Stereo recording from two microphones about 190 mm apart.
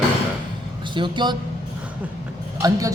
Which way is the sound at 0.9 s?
25° right (ahead or behind).